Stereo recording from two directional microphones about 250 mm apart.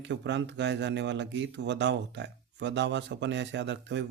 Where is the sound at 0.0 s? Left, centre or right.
Right.